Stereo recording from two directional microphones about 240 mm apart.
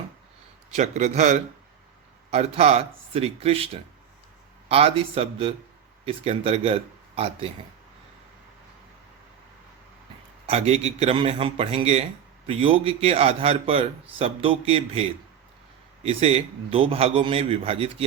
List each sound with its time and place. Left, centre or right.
0.8 s a man's voice: right
4.7 s a man's voice: right
10.4 s a man's voice: right